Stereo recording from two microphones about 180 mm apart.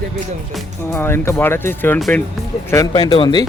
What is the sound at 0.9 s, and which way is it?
Speech, 15° left (ahead or behind).